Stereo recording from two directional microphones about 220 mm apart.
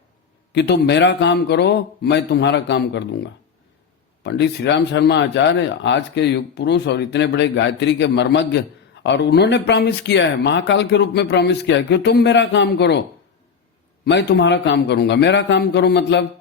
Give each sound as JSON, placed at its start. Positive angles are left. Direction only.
{"t": 0.5, "sound": "speech", "side_deg": 50}
{"t": 4.2, "sound": "speech", "side_deg": 50}
{"t": 14.0, "sound": "speech", "side_deg": 50}